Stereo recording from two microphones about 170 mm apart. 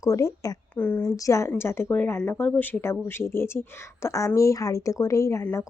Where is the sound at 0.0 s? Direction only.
20° left (ahead or behind).